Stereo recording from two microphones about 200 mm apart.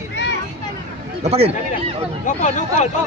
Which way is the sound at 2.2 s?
35° left (ahead or behind).